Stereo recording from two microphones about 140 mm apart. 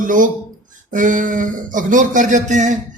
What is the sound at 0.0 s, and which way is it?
A man's voice, 70° right (ahead or behind).